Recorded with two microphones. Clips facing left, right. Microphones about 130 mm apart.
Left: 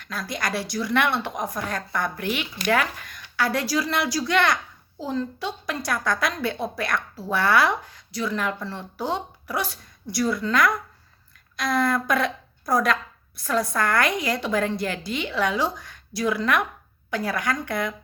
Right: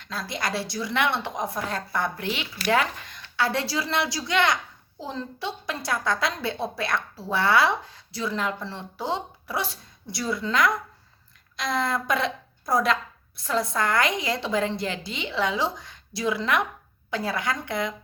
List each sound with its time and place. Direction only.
0.0 s a woman's voice: 25° right (ahead or behind)
15.8 s a sound: 55° left (ahead or behind)
16.2 s a woman's voice: 25° right (ahead or behind)